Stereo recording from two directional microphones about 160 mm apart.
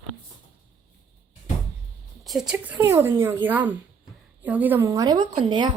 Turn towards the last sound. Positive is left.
turn(degrees=-30)  # may be behind; listen again after turning